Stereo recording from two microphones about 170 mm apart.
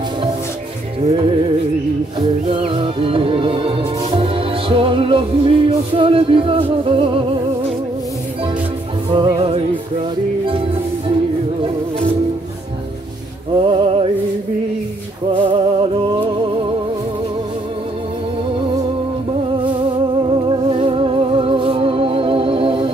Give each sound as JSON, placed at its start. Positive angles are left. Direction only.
{"t": 1.0, "sound": "music", "side_deg": -30}
{"t": 9.1, "sound": "music", "side_deg": -30}
{"t": 13.6, "sound": "music", "side_deg": -30}
{"t": 15.5, "sound": "music", "side_deg": -30}
{"t": 20.2, "sound": "music", "side_deg": -30}